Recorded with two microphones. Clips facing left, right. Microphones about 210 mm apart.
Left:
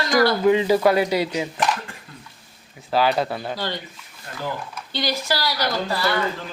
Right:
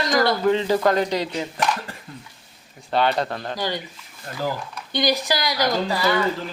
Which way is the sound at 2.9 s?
5° left (ahead or behind).